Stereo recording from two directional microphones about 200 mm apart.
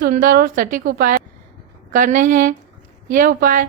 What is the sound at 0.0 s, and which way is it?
A woman's voice, 45° right (ahead or behind).